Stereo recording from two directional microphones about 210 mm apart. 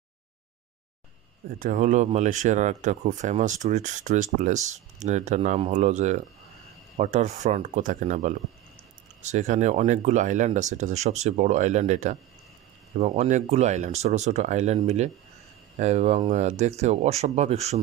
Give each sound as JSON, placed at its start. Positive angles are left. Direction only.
{"t": 1.6, "sound": "speech", "side_deg": -40}
{"t": 15.8, "sound": "speech", "side_deg": -35}